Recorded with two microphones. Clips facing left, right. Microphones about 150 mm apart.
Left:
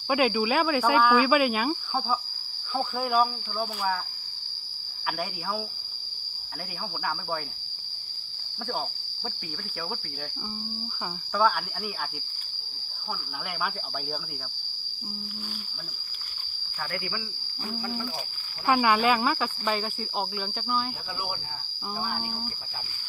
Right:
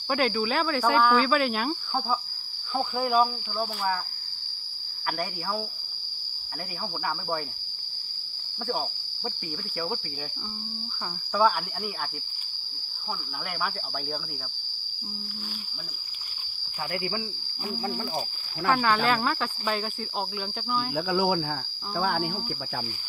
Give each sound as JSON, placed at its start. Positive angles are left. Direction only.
{"t": 0.1, "sound": "speech", "side_deg": 5}
{"t": 18.7, "sound": "speech", "side_deg": 10}
{"t": 20.9, "sound": "speech", "side_deg": -90}